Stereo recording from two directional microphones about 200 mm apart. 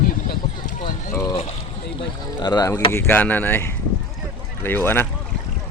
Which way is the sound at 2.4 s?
20° left (ahead or behind).